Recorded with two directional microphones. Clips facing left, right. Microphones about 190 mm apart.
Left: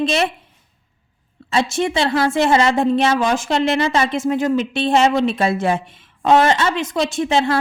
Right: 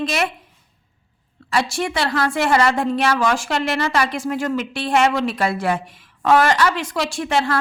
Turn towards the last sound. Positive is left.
turn(degrees=20)  # may be behind; listen again after turning